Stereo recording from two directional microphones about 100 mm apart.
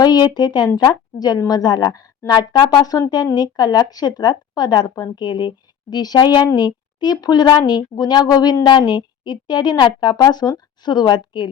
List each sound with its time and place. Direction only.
0.0 s a woman's voice: 40° left (ahead or behind)